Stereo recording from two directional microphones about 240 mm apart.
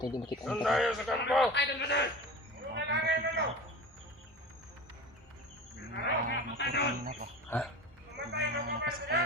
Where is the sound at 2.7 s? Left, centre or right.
Right.